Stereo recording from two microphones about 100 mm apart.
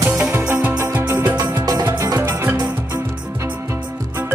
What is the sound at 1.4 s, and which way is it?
Music, 35° right (ahead or behind).